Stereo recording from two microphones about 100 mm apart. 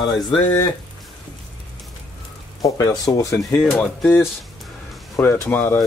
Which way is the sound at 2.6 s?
35° left (ahead or behind).